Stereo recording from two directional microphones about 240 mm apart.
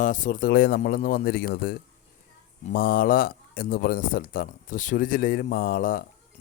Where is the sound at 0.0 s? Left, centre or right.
Left.